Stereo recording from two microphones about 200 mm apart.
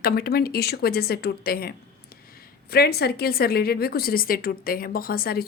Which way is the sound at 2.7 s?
50° left (ahead or behind).